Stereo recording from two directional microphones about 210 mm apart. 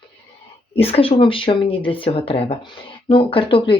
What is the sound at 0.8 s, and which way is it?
Speech, 25° left (ahead or behind).